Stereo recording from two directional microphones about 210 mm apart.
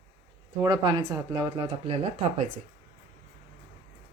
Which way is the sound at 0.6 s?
20° right (ahead or behind).